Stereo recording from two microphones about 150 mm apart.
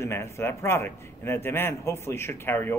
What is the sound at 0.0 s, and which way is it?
A man's voice, 15° left (ahead or behind).